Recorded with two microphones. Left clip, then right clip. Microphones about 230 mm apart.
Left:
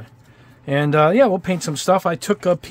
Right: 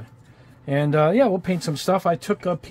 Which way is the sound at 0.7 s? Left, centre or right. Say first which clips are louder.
Left 4 dB; centre.